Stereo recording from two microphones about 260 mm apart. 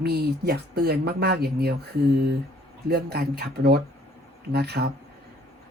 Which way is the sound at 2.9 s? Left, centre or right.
Right.